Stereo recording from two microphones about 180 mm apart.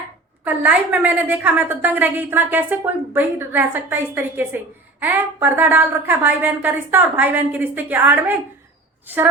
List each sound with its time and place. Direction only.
0.4 s a woman's voice: 10° right (ahead or behind)